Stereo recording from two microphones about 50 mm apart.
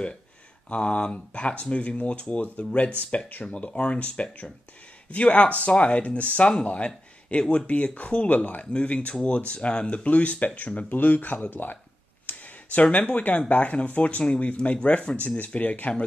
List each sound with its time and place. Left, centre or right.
0.7 s speech: left
3.3 s speech: left
3.5 s speech: left
12.3 s a sound: left
13.5 s speech: left